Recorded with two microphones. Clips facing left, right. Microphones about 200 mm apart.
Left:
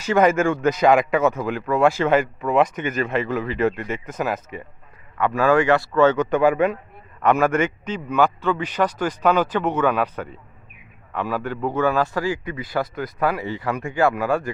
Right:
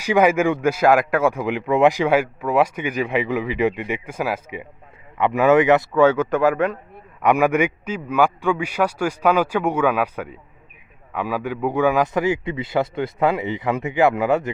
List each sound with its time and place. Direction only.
0.0 s a man's voice: 10° right (ahead or behind)
5.1 s a man's voice: 20° right (ahead or behind)
5.9 s speech: 10° right (ahead or behind)
7.2 s a man's voice: 15° right (ahead or behind)